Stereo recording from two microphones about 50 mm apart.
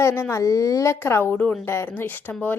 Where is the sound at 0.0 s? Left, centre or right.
Left.